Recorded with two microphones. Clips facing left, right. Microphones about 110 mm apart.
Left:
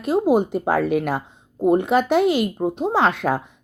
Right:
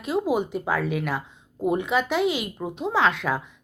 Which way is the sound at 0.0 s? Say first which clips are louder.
Left 6 dB; 45° left (ahead or behind).